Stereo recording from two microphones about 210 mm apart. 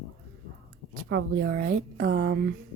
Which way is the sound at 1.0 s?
55° right (ahead or behind).